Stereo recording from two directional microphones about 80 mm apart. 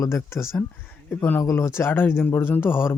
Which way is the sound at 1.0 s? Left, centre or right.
Left.